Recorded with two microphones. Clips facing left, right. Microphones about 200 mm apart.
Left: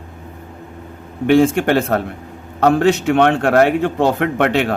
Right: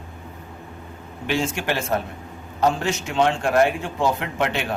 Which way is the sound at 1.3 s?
55° left (ahead or behind).